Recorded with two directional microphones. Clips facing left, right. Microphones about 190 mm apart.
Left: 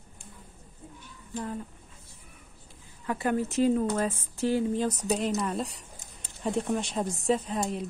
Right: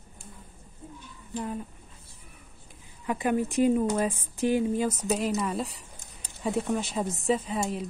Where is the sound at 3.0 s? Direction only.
15° right (ahead or behind).